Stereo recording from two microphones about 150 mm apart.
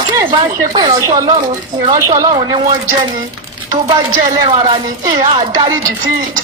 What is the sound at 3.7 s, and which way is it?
A woman's voice, 25° right (ahead or behind).